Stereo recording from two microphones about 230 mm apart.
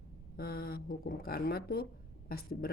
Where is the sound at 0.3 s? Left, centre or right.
Left.